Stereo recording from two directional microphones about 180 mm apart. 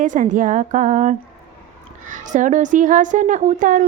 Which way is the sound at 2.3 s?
45° right (ahead or behind).